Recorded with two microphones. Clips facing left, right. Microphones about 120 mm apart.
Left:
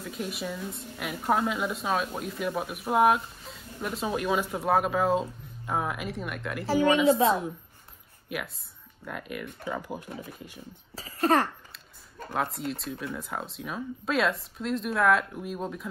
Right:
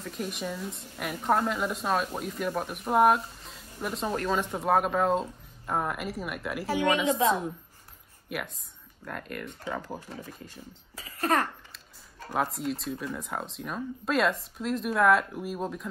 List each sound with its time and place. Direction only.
0.0 s a woman's voice: 5° left (ahead or behind)
7.1 s a child's voice: 30° left (ahead or behind)
8.3 s speech: centre (ahead or behind)
11.0 s a child's voice: 30° left (ahead or behind)
12.3 s a woman's voice: centre (ahead or behind)